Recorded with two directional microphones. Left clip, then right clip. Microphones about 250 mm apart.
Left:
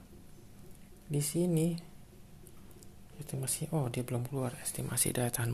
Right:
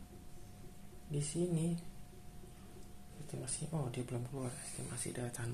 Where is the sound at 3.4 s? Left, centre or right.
Left.